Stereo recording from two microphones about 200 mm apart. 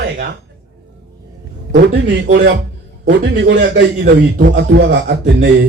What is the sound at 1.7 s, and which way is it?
Speech, 60° right (ahead or behind).